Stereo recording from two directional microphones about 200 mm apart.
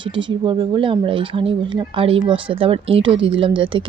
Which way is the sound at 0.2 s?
25° right (ahead or behind).